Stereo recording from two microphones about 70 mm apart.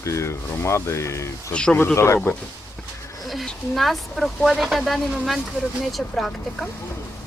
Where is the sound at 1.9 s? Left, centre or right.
Left.